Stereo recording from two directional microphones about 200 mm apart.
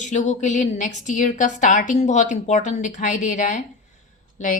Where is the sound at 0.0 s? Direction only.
35° left (ahead or behind).